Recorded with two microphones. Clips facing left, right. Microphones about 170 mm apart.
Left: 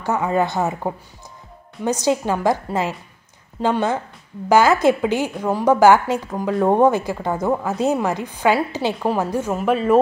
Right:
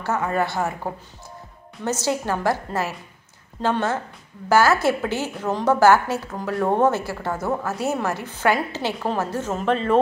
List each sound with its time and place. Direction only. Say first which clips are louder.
0.0 s a woman's voice: left 3 dB; 15° left (ahead or behind)